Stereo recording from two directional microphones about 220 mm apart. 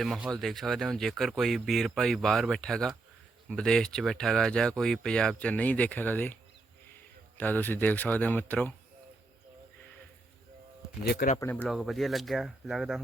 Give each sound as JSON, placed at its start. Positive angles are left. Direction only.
{"t": 0.0, "sound": "speech", "side_deg": 0}
{"t": 7.3, "sound": "speech", "side_deg": 10}
{"t": 11.0, "sound": "speech", "side_deg": 45}
{"t": 11.3, "sound": "speech", "side_deg": 10}